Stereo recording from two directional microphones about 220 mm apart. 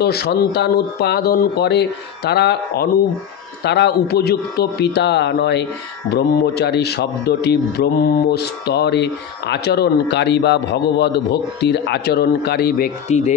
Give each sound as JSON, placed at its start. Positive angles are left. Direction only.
{"t": 0.0, "sound": "a man's voice", "side_deg": 45}